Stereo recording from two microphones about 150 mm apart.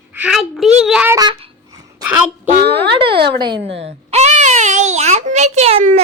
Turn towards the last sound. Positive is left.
turn(degrees=-45)  # may be behind; listen again after turning